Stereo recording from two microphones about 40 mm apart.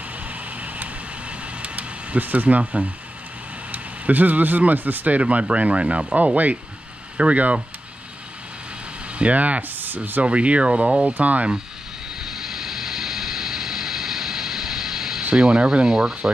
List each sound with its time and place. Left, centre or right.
0.3 s vehicle: right
1.6 s a sound: right
3.7 s speech: right
5.2 s speech: right
9.2 s speech: right
9.8 s speech: right
10.2 s speech: right
11.1 s speech: right
12.2 s vehicle: centre
15.3 s speech: right